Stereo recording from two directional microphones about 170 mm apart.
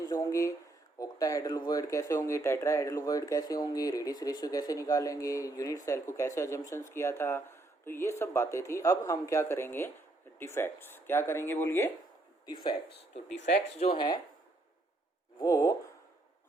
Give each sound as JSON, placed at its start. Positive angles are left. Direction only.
{"t": 0.0, "sound": "speech", "side_deg": 20}
{"t": 13.7, "sound": "speech", "side_deg": 30}
{"t": 15.4, "sound": "speech", "side_deg": 20}